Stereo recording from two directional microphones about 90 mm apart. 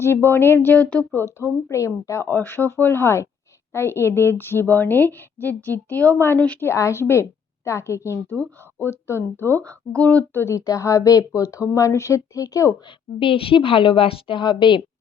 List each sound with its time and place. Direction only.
0.0 s a woman's voice: 25° left (ahead or behind)
1.2 s a woman's voice: 35° left (ahead or behind); by 6.7 s 15° left (ahead or behind)
6.7 s a woman's voice: 30° left (ahead or behind)
9.9 s speech: 15° left (ahead or behind)
10.7 s speech: 35° left (ahead or behind)
13.1 s a woman's voice: 80° left; by 14.8 s 60° left (ahead or behind)